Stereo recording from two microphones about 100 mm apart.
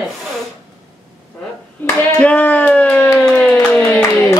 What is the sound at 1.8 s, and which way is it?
Clapping, 20° left (ahead or behind).